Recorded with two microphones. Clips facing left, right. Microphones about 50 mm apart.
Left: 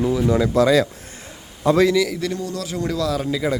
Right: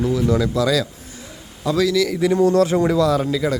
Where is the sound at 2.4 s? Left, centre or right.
Right.